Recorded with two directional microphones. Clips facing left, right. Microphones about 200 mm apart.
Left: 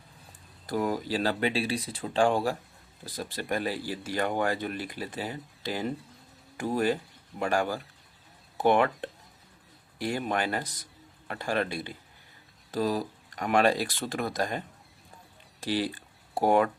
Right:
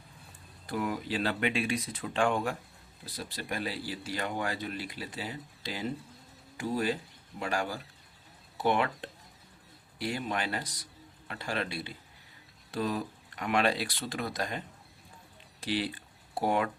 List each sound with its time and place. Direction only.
0.7 s speech: 40° left (ahead or behind)
3.2 s speech: 50° left (ahead or behind)
15.6 s speech: 40° left (ahead or behind)